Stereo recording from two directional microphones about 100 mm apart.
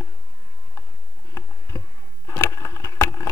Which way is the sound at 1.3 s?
35° left (ahead or behind).